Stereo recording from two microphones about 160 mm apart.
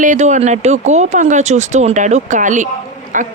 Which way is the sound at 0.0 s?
50° right (ahead or behind).